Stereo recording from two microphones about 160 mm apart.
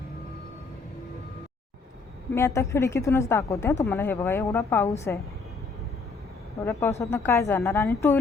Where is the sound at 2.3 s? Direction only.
15° left (ahead or behind).